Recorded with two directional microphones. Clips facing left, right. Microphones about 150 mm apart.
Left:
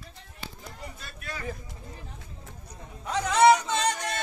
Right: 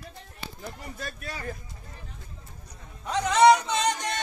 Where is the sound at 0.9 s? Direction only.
40° right (ahead or behind).